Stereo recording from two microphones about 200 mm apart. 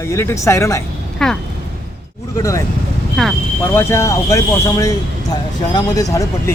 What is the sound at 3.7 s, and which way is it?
Speech, 10° left (ahead or behind).